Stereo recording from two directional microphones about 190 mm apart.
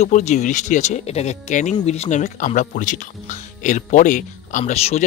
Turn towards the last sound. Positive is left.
turn(degrees=35)  # may be behind; listen again after turning